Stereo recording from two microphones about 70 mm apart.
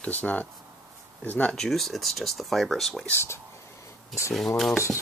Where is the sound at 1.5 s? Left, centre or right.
Centre.